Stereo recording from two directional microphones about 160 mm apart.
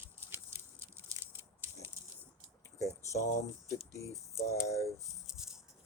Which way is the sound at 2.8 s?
20° left (ahead or behind).